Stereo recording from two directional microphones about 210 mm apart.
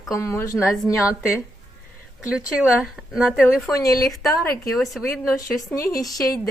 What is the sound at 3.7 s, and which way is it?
Speech, 15° left (ahead or behind).